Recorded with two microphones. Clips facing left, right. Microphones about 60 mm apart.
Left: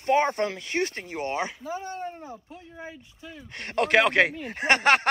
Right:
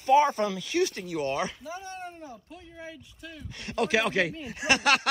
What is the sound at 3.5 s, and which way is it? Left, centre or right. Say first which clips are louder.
Speech: left 4 dB; left.